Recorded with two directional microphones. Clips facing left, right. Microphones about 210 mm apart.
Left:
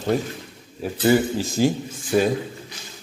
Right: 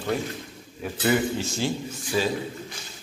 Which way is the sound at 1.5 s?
50° left (ahead or behind).